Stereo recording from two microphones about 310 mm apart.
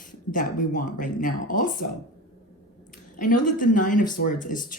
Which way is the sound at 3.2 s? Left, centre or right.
Left.